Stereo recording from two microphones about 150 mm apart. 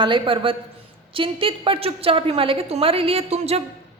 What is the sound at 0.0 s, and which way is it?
A woman's voice, 35° right (ahead or behind).